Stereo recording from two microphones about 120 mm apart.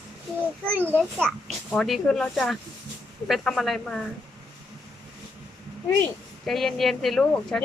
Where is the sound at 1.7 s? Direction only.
5° left (ahead or behind).